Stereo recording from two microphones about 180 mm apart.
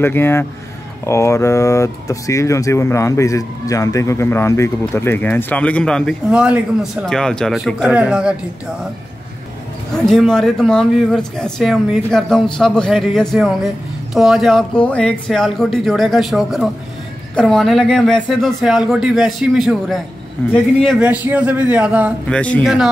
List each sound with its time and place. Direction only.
0.0 s speech: 15° left (ahead or behind); by 8.4 s 5° right (ahead or behind)
10.0 s speech: 5° left (ahead or behind)
21.0 s a man's voice: 10° right (ahead or behind)
22.3 s speech: 5° left (ahead or behind)